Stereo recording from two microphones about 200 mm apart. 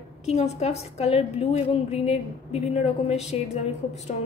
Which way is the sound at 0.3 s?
30° left (ahead or behind).